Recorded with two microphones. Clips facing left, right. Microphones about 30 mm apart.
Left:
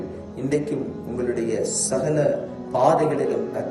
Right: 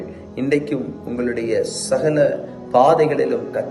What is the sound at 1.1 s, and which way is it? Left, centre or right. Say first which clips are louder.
Speech: right 4 dB; right.